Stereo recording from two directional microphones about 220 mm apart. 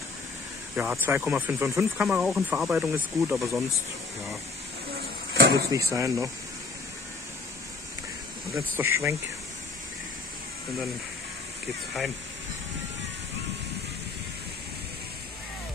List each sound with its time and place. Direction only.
0.7 s speech: 5° right (ahead or behind)
4.9 s a sound: 45° right (ahead or behind)
5.7 s speech: 15° right (ahead or behind)
8.5 s speech: 10° right (ahead or behind)